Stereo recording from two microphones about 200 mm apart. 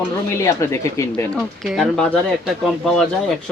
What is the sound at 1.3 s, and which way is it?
Speech, centre (ahead or behind).